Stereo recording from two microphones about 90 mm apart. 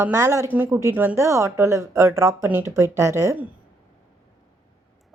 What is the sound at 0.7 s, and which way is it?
Speech, 35° right (ahead or behind).